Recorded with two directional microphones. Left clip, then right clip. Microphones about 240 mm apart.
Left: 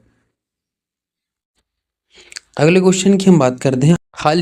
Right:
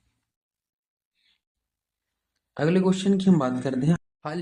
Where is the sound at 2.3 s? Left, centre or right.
Left.